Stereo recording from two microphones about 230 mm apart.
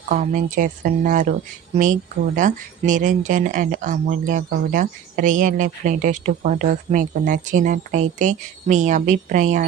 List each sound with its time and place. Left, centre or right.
0.1 s speech: right